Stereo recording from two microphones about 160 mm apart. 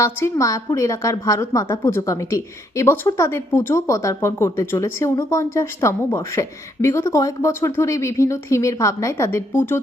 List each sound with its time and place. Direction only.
0.0 s a woman's voice: 20° left (ahead or behind)